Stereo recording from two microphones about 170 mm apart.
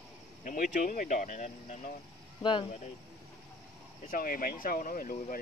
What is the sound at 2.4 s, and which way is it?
Speech, 30° left (ahead or behind).